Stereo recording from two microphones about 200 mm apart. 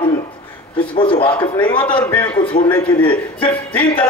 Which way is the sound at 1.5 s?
10° left (ahead or behind).